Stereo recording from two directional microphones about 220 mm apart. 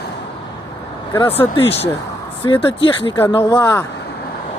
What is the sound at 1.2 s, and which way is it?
Speech, 25° left (ahead or behind).